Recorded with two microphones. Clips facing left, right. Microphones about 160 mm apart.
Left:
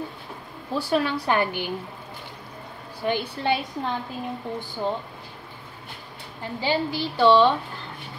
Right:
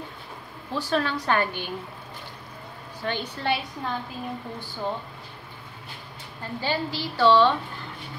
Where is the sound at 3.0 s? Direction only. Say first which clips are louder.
Left 4 dB; 15° left (ahead or behind).